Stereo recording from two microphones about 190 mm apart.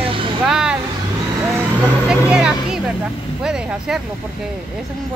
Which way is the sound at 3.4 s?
5° right (ahead or behind).